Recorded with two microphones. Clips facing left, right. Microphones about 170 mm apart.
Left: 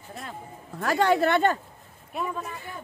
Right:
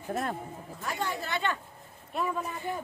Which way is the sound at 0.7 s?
80° left.